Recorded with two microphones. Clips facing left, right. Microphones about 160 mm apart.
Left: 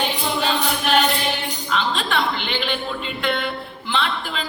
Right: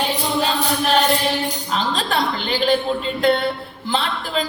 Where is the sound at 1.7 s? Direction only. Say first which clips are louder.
Even; 40° right (ahead or behind).